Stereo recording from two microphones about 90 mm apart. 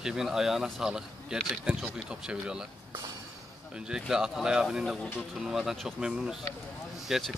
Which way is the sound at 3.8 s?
5° right (ahead or behind).